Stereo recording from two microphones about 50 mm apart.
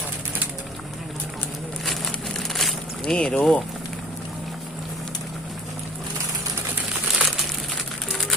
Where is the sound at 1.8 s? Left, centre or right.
Centre.